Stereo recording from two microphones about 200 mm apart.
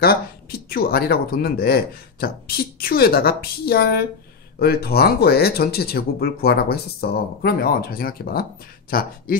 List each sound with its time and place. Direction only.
0.0 s speech: 50° left (ahead or behind)